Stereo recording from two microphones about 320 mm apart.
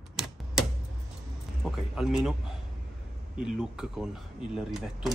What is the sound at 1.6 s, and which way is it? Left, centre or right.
Speech, centre.